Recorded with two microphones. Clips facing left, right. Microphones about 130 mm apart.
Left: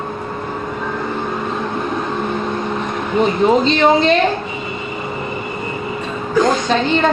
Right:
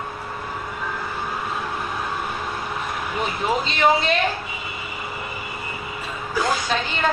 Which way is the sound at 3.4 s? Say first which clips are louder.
Left 9 dB; 30° left (ahead or behind).